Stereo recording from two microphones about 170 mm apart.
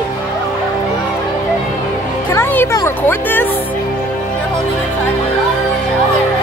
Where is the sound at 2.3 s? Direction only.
15° left (ahead or behind).